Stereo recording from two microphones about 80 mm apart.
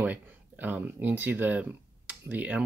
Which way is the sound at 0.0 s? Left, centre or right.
Right.